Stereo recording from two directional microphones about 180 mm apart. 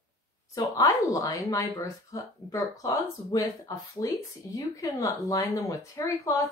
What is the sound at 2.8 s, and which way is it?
Speech, 20° left (ahead or behind).